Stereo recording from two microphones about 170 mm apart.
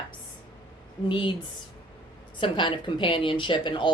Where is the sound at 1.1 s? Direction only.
30° left (ahead or behind).